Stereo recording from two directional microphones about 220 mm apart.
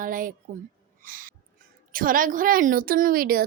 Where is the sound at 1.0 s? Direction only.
40° right (ahead or behind).